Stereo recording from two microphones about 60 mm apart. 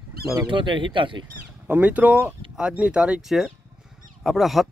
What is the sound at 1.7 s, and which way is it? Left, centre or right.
Speech, right.